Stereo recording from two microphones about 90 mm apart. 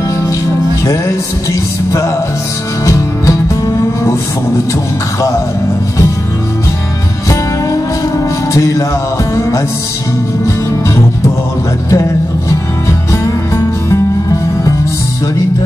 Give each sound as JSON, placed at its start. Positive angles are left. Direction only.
{"t": 0.8, "sound": "music", "side_deg": 40}
{"t": 8.5, "sound": "music", "side_deg": 40}
{"t": 11.9, "sound": "music", "side_deg": 35}